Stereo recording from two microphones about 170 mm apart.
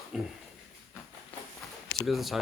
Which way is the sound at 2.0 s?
Centre (ahead or behind).